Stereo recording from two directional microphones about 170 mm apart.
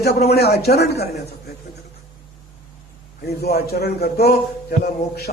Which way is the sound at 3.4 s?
70° left (ahead or behind).